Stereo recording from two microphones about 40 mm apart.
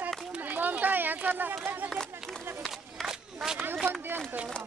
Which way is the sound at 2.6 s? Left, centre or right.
Centre.